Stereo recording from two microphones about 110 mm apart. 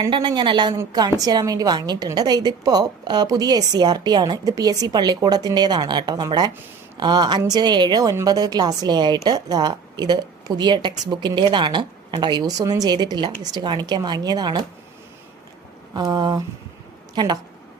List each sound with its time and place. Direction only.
0.1 s a woman's voice: 45° right (ahead or behind)
16.0 s a woman's voice: 40° right (ahead or behind)